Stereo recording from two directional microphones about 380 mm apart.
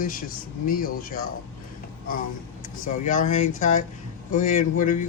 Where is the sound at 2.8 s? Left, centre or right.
Centre.